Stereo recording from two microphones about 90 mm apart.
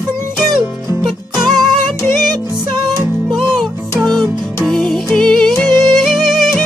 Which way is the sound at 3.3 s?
5° right (ahead or behind).